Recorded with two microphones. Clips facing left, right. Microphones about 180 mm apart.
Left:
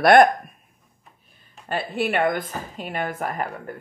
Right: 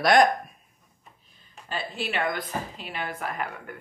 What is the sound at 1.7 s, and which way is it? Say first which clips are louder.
A woman's voice: left 7 dB; 55° left (ahead or behind).